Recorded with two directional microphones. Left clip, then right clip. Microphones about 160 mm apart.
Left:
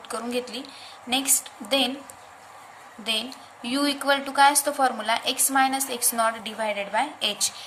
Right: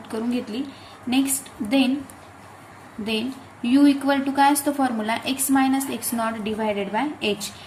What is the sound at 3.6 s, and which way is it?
A woman's voice, 25° left (ahead or behind).